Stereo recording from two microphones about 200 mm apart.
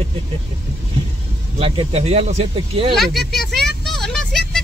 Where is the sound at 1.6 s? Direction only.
30° right (ahead or behind).